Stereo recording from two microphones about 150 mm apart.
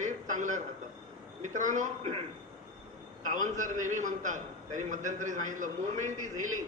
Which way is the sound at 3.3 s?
55° right (ahead or behind).